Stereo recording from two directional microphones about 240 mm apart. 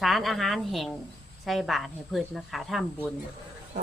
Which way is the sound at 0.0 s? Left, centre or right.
Centre.